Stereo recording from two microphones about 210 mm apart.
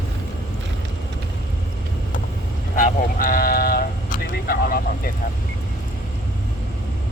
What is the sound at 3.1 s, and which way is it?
Sheep, 45° left (ahead or behind).